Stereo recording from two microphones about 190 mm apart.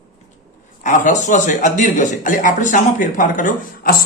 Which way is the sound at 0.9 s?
40° left (ahead or behind).